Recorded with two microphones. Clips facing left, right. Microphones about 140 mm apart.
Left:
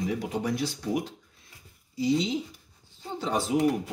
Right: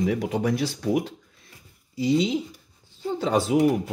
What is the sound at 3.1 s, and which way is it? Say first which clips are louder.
Speech: right 5 dB; 75° right (ahead or behind).